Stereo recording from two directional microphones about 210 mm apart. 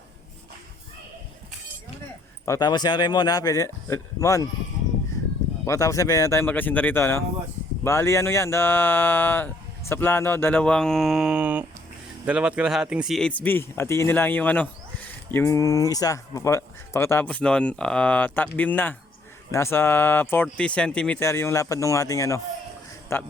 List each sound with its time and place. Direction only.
2.5 s speech: 20° left (ahead or behind)
5.6 s speech: 15° left (ahead or behind)